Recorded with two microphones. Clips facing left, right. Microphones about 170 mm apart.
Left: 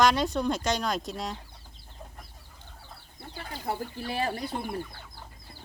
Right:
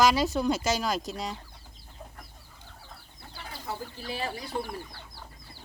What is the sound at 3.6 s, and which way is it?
Speech, 55° left (ahead or behind).